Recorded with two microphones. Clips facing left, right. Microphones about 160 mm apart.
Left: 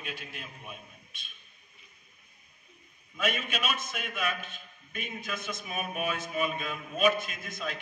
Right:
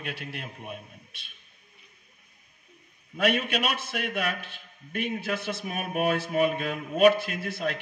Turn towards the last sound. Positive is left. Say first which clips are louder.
# right 7 dB
turn(degrees=-65)  # may be behind; listen again after turning